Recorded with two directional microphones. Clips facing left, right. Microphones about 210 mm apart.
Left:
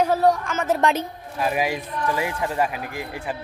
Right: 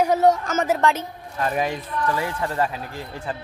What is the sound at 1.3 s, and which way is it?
Speech, 10° left (ahead or behind).